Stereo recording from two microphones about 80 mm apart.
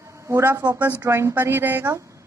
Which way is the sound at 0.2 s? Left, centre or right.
Right.